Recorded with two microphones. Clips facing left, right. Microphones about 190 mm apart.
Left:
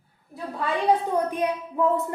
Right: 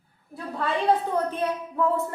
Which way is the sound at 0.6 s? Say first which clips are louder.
Left 1 dB; 15° left (ahead or behind).